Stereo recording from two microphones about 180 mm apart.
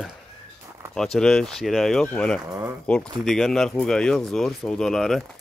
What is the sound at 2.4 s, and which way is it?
Speech, 20° right (ahead or behind).